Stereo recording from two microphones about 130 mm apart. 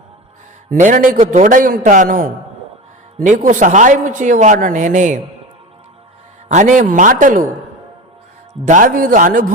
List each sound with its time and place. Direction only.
0.7 s a man's voice: 90° right; by 5.2 s 75° right (ahead or behind)
6.5 s speech: 70° right (ahead or behind); by 7.4 s 85° right
8.6 s a man's voice: 85° right